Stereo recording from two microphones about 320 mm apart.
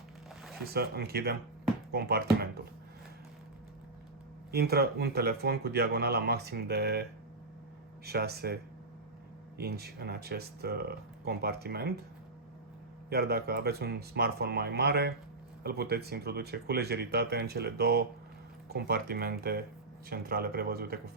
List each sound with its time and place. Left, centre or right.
0.6 s speech: right
4.5 s speech: right
9.6 s speech: right
13.1 s speech: right